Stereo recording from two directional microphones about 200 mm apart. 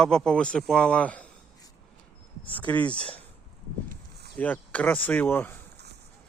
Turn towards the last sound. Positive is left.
turn(degrees=10)  # may be behind; listen again after turning